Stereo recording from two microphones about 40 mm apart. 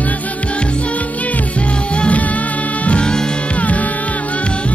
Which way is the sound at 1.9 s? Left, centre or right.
Left.